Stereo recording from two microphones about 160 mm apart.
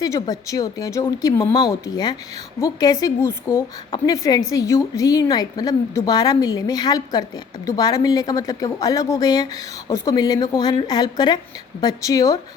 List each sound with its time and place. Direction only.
0.0 s a woman's voice: 20° left (ahead or behind)